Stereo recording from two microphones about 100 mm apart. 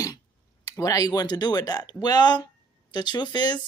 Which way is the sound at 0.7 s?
35° left (ahead or behind).